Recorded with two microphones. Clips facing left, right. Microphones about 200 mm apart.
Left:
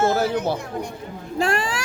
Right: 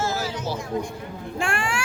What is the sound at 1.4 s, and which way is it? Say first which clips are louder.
Speech: left 4 dB; 35° left (ahead or behind).